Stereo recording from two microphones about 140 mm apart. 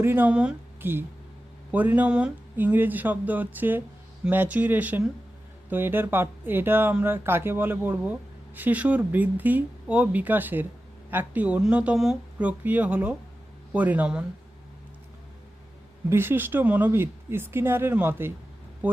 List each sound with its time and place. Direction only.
0.0 s speech: 15° right (ahead or behind)
16.0 s speech: 15° right (ahead or behind)